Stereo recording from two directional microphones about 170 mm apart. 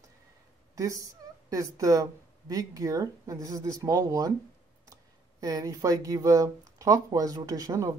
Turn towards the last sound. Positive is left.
turn(degrees=-20)  # may be behind; listen again after turning